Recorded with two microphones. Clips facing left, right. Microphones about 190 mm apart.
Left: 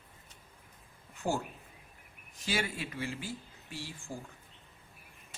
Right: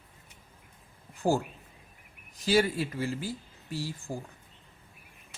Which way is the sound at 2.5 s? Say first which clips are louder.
Right 10 dB; 40° right (ahead or behind).